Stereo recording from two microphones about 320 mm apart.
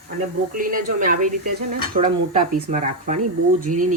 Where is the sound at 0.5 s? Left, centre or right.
Right.